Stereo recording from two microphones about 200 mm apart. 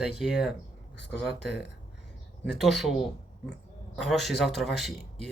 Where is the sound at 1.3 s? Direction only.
55° left (ahead or behind).